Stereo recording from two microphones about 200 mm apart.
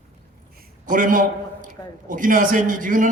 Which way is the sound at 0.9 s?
40° right (ahead or behind).